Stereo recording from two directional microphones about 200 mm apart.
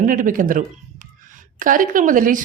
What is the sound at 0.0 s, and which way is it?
Speech, 40° right (ahead or behind).